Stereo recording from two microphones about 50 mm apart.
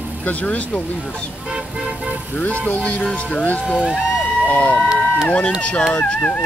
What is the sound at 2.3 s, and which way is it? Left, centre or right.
Speech, left.